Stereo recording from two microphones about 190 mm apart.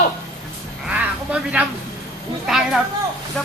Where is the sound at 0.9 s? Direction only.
5° right (ahead or behind).